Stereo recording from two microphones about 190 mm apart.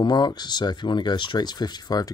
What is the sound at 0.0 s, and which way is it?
Speech, 20° left (ahead or behind).